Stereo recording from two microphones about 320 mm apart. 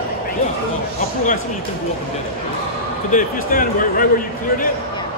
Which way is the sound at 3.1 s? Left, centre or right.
Left.